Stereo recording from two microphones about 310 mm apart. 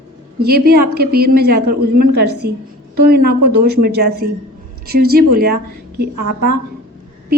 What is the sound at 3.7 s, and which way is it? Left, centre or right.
A woman's voice, right.